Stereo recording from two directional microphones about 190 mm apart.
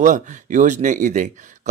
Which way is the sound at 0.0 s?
40° right (ahead or behind).